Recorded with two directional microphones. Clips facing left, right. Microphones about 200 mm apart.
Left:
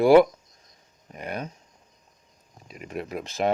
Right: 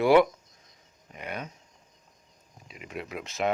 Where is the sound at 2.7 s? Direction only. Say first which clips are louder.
Left 5 dB; 45° left (ahead or behind).